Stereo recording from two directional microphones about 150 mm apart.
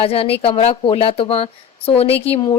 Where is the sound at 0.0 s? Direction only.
40° left (ahead or behind).